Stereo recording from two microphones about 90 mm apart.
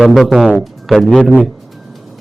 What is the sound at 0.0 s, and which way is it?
A man's voice, centre (ahead or behind).